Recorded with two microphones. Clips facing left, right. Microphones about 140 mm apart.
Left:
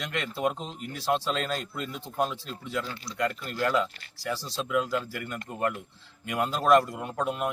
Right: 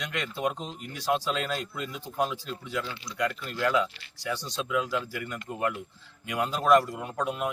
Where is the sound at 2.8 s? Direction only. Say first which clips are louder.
Even; 40° left (ahead or behind).